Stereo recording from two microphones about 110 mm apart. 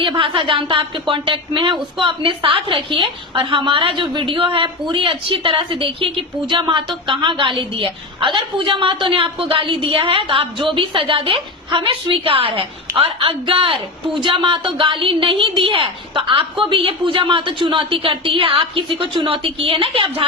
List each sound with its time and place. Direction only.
0.0 s speech: 50° right (ahead or behind)